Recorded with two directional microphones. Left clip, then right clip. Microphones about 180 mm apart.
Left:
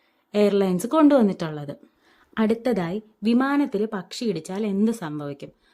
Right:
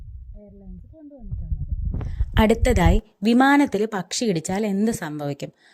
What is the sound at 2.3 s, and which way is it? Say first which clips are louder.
A woman's voice: right 4 dB; 30° right (ahead or behind).